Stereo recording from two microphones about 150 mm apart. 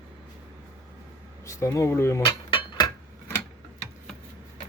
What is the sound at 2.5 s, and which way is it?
Cutlery, 30° left (ahead or behind).